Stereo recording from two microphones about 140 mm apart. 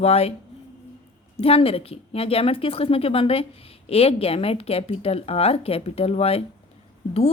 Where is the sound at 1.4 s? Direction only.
45° left (ahead or behind).